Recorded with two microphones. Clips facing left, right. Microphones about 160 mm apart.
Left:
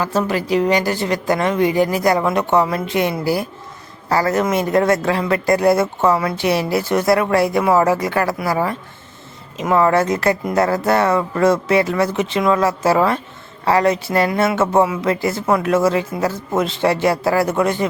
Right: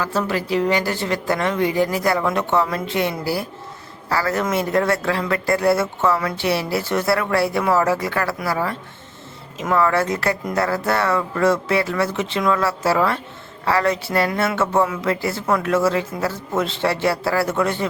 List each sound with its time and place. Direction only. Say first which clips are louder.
0.0 s a woman's voice: left 3 dB; 20° left (ahead or behind)